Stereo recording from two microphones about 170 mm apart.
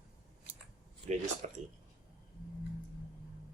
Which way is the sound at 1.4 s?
45° right (ahead or behind).